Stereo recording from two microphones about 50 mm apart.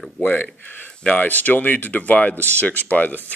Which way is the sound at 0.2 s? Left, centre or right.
Left.